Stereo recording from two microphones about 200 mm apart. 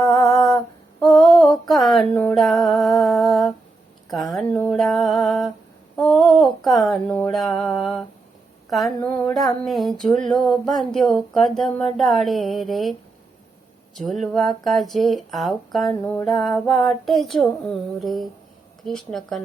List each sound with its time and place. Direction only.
0.0 s humming: 15° left (ahead or behind)
0.9 s music: 5° left (ahead or behind)
4.1 s a sound: centre (ahead or behind)